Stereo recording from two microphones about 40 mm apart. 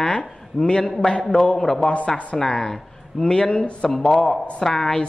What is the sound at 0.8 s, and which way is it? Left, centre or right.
A woman's voice, centre.